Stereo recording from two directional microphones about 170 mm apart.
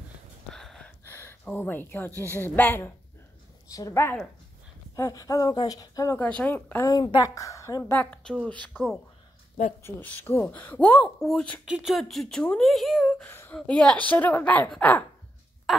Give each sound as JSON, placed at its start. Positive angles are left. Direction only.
{"t": 0.5, "sound": "a sound", "side_deg": 5}
{"t": 3.7, "sound": "speech", "side_deg": 15}
{"t": 6.1, "sound": "speech", "side_deg": 10}
{"t": 6.9, "sound": "speech", "side_deg": 25}
{"t": 9.8, "sound": "speech", "side_deg": 15}